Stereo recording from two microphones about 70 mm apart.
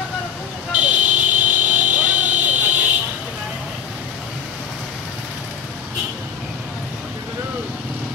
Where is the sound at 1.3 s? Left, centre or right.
Right.